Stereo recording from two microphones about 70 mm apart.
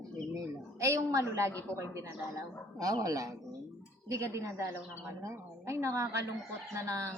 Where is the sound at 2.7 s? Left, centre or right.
Right.